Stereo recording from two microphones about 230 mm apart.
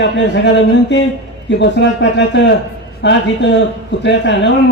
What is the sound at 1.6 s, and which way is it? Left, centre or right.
A man's voice, left.